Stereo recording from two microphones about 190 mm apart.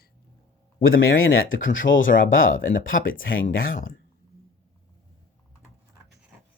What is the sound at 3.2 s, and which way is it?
Speech, 90° left.